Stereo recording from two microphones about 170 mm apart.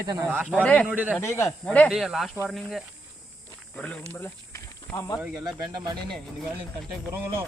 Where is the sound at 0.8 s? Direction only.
10° right (ahead or behind).